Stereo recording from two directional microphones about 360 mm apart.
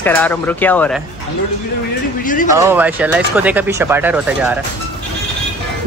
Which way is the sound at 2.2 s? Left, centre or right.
Left.